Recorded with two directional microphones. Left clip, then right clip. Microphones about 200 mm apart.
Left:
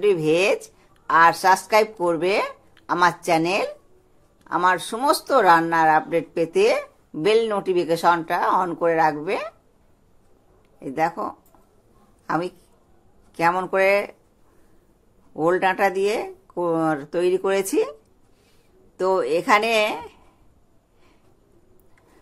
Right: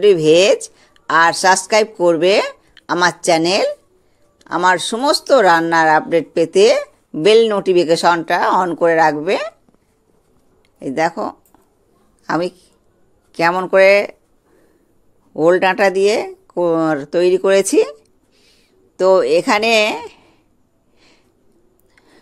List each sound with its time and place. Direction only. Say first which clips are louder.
0.0 s speech: right 8 dB; 30° right (ahead or behind)
10.8 s speech: right 6 dB; 35° right (ahead or behind)
15.3 s speech: right 7 dB; 25° right (ahead or behind)
18.9 s speech: right 9 dB; 30° right (ahead or behind)